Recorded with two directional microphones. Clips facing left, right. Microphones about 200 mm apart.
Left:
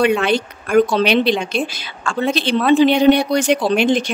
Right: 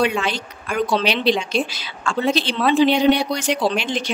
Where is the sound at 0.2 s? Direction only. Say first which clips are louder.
Left 8 dB; 55° left (ahead or behind).